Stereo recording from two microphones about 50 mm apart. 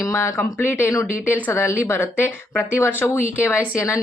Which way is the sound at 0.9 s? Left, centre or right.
Left.